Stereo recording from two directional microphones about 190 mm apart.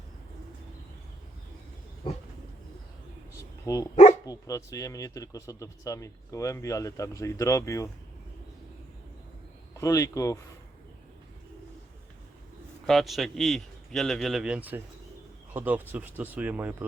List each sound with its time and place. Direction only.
3.7 s speech: 20° left (ahead or behind)
9.7 s speech: 15° left (ahead or behind)
12.9 s a man's voice: centre (ahead or behind)